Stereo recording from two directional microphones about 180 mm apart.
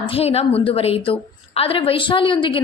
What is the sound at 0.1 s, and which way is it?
A woman's voice, 35° left (ahead or behind).